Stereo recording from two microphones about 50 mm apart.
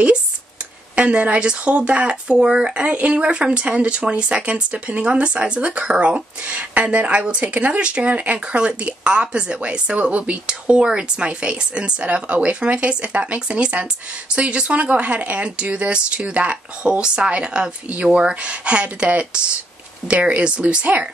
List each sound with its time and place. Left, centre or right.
0.9 s speech: right
2.8 s speech: right